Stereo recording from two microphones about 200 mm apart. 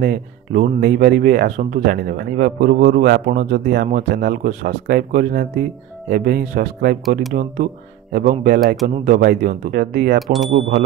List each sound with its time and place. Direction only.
0.0 s speech: 50° right (ahead or behind)
10.2 s speech: centre (ahead or behind)